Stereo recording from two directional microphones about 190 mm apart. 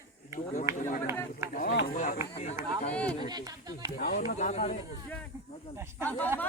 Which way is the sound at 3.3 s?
20° right (ahead or behind).